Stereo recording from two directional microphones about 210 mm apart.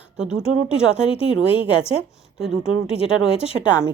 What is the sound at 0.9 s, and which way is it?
Speech, 25° left (ahead or behind).